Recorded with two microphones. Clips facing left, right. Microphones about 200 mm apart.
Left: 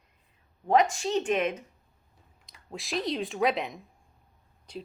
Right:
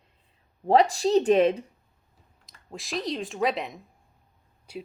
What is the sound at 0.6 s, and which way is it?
Speech, 35° right (ahead or behind).